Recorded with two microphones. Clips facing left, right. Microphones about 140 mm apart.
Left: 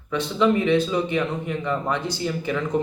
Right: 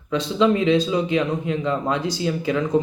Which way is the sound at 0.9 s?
15° right (ahead or behind).